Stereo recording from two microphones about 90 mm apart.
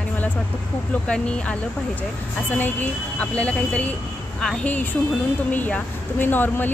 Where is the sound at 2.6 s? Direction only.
20° left (ahead or behind).